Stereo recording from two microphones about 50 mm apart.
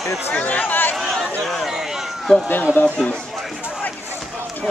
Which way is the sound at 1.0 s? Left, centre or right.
Centre.